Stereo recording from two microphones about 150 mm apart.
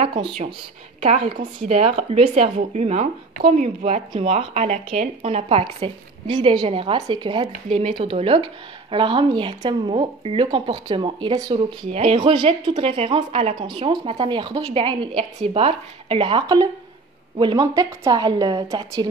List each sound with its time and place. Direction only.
0.0 s speech: 35° right (ahead or behind)
1.0 s a woman's voice: 50° right (ahead or behind); by 19.0 s 25° right (ahead or behind)